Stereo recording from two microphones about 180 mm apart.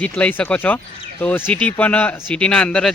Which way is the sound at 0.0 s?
10° left (ahead or behind).